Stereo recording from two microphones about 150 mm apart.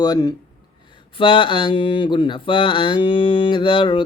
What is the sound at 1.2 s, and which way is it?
Speech, 35° left (ahead or behind).